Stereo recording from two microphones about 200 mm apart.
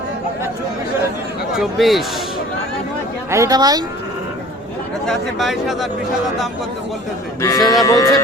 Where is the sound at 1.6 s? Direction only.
Centre (ahead or behind).